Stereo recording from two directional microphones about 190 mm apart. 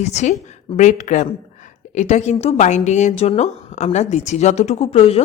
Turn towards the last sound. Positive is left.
turn(degrees=35)  # may be behind; listen again after turning